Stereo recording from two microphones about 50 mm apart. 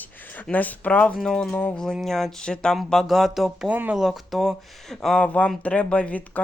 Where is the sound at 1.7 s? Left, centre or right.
Centre.